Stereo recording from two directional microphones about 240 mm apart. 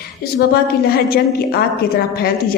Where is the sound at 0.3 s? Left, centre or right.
Left.